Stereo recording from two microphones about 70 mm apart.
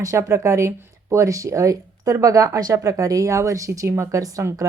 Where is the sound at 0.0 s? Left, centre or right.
Right.